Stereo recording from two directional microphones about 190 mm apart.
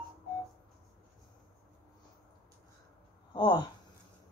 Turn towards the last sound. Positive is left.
turn(degrees=25)  # may be behind; listen again after turning